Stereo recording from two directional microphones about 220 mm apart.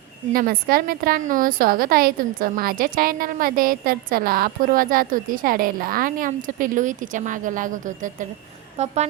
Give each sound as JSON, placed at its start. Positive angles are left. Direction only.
{"t": 0.3, "sound": "a woman's voice", "side_deg": -40}
{"t": 8.8, "sound": "music", "side_deg": -30}